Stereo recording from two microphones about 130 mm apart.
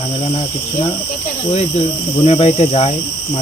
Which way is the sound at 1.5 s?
50° left (ahead or behind).